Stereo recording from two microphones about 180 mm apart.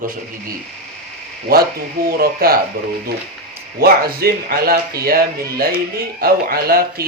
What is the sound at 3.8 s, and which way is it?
Speech, 55° right (ahead or behind).